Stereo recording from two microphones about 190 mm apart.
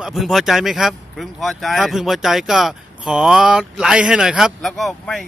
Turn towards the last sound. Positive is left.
turn(degrees=0)  # may be behind; listen again after turning